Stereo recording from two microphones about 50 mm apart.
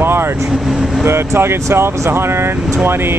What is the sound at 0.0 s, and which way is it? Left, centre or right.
Vehicle, right.